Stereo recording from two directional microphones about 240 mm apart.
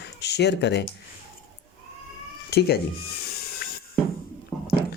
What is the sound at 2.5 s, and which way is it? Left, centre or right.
Speech, left.